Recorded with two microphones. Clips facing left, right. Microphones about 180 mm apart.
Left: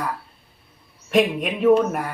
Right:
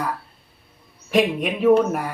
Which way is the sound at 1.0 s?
5° right (ahead or behind).